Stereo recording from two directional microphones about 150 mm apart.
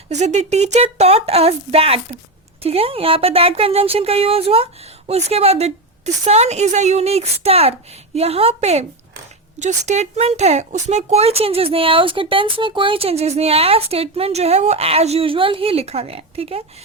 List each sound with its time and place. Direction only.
0.1 s a woman's voice: 50° right (ahead or behind)